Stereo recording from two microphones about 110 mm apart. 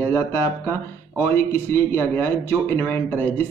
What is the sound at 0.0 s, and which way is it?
Speech, 20° left (ahead or behind).